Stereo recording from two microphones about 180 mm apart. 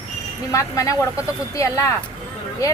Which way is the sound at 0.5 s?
15° left (ahead or behind).